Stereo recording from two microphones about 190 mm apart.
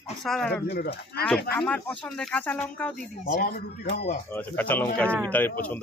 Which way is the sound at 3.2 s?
55° left (ahead or behind).